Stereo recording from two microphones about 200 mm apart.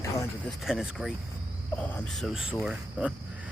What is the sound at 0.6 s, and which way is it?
Speech, centre (ahead or behind).